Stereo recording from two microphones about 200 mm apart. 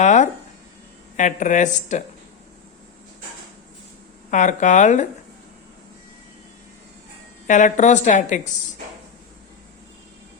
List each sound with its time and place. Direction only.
0.0 s speech: 35° left (ahead or behind)
4.3 s speech: 40° left (ahead or behind)
7.4 s speech: 40° left (ahead or behind)